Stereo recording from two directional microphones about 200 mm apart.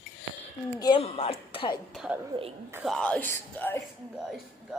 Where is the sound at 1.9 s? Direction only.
5° right (ahead or behind); by 3.8 s 10° left (ahead or behind).